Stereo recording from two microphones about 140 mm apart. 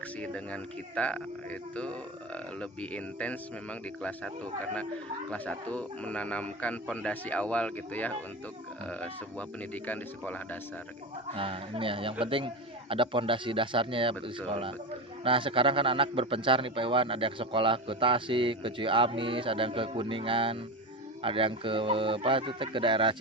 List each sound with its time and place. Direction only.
0.2 s speech: 10° left (ahead or behind)
5.3 s speech: 10° left (ahead or behind)
9.8 s speech: 10° left (ahead or behind)
11.3 s speech: 40° right (ahead or behind)